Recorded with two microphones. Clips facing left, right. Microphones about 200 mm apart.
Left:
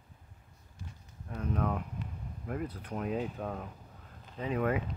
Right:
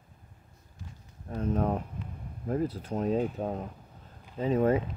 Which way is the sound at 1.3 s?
30° right (ahead or behind).